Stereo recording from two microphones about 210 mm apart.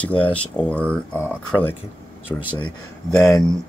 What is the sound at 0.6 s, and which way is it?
Speech, 5° left (ahead or behind).